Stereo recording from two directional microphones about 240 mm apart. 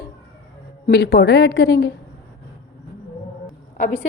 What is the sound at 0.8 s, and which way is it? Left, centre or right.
Speech, left.